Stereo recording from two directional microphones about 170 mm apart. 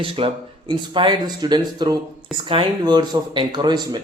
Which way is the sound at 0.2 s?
35° right (ahead or behind).